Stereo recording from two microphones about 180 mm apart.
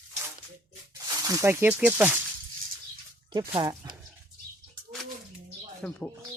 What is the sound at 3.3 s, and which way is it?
Speech, 25° right (ahead or behind).